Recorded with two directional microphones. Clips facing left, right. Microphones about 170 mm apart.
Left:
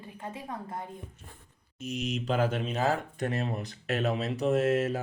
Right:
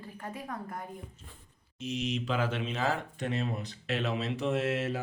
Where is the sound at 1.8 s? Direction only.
45° left (ahead or behind).